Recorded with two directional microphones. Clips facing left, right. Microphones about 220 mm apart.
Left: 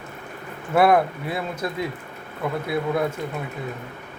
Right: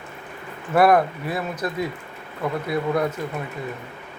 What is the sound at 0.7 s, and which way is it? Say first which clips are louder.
Speech: right 1 dB; 5° left (ahead or behind).